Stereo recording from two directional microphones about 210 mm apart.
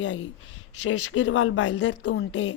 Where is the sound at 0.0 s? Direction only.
60° left (ahead or behind).